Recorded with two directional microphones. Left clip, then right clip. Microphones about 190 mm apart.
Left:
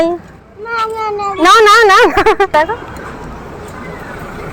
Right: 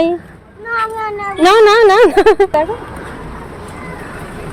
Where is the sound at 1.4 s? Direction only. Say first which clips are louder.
Left 1 dB; 20° right (ahead or behind).